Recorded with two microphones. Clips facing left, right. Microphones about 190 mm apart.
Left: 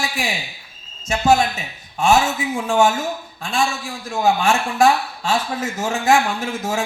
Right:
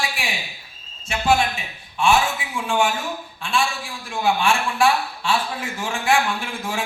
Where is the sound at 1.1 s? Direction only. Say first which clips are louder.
Left 3 dB; 40° left (ahead or behind).